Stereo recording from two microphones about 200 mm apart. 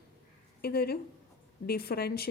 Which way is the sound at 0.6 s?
50° left (ahead or behind).